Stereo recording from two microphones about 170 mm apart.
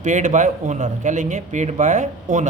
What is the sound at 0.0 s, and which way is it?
A man's voice, 50° right (ahead or behind).